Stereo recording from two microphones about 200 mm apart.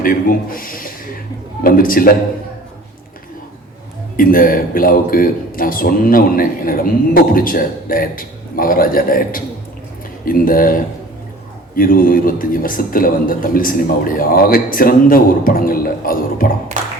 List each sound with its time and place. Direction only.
0.0 s a man's voice: 45° left (ahead or behind)
4.2 s a man's voice: 45° left (ahead or behind)